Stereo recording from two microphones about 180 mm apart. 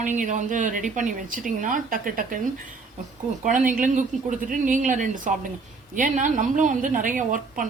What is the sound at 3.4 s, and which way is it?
A woman's voice, 50° right (ahead or behind).